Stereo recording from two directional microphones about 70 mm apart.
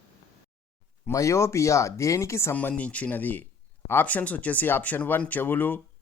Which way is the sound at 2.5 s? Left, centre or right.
Left.